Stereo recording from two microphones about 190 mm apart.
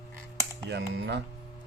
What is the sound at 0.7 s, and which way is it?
Speech, 65° right (ahead or behind).